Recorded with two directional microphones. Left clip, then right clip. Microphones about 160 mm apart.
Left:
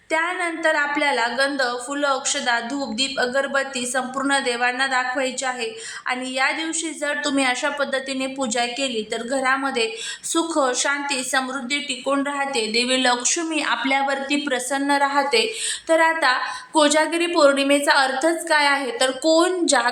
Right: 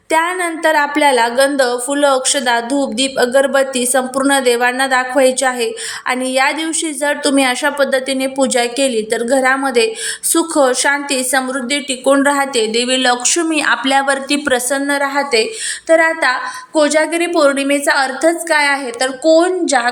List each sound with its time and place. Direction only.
0.1 s a woman's voice: 30° right (ahead or behind)
12.2 s a woman's voice: 45° right (ahead or behind)
12.5 s a woman's voice: 20° right (ahead or behind)
16.7 s speech: 5° right (ahead or behind)
17.0 s a woman's voice: 15° right (ahead or behind)